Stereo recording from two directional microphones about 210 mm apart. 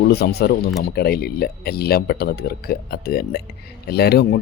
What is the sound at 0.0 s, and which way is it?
Speech, 50° left (ahead or behind).